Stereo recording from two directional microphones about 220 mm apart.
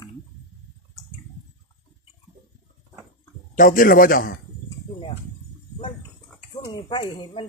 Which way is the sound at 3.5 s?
40° left (ahead or behind).